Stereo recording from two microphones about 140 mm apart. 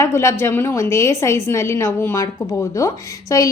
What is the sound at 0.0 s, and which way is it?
A woman's voice, 20° left (ahead or behind).